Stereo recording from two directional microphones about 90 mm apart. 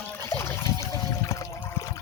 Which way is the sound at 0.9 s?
40° left (ahead or behind).